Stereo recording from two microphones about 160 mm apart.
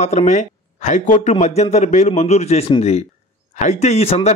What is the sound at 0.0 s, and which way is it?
A man's voice, 45° left (ahead or behind).